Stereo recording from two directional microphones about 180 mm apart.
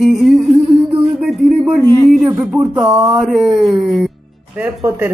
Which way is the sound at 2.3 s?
10° right (ahead or behind).